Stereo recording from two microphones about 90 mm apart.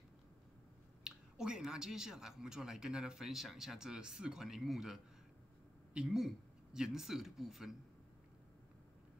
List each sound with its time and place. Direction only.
1.0 s speech: 10° right (ahead or behind)